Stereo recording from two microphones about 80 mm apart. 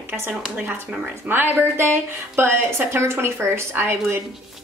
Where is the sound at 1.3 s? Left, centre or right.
Right.